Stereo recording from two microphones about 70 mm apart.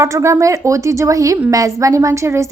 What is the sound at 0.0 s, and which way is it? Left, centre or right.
A woman's voice, right.